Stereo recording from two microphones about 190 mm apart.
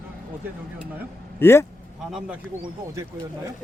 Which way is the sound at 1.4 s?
10° left (ahead or behind).